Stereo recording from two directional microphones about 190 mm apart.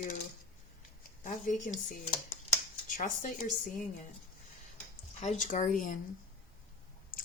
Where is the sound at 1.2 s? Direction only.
45° left (ahead or behind).